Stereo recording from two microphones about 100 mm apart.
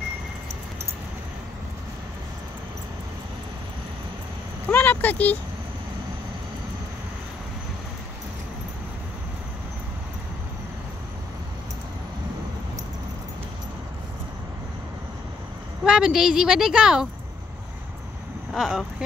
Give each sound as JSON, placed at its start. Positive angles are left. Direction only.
{"t": 4.6, "sound": "vehicle", "side_deg": 20}
{"t": 15.8, "sound": "speech", "side_deg": -5}
{"t": 18.5, "sound": "speech", "side_deg": -5}